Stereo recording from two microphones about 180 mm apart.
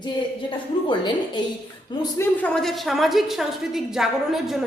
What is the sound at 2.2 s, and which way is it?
A woman's voice, 5° left (ahead or behind).